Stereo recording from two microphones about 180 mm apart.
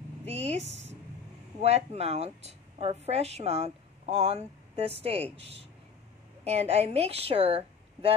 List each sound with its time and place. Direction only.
0.2 s a woman's voice: 35° right (ahead or behind)
6.4 s a woman's voice: 35° right (ahead or behind)